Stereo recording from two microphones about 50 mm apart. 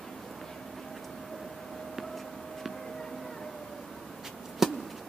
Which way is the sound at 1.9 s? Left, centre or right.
Centre.